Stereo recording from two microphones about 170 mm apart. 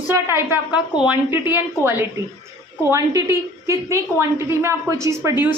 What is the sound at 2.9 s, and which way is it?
A woman's voice, 15° right (ahead or behind).